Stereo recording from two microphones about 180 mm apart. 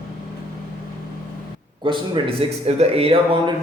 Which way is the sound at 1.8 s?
25° right (ahead or behind).